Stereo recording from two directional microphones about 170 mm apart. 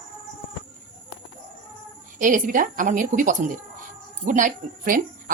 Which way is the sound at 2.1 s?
50° right (ahead or behind).